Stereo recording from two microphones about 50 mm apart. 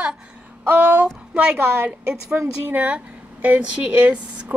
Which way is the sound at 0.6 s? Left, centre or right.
Right.